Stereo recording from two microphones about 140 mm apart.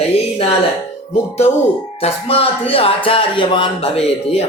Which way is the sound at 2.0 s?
45° left (ahead or behind).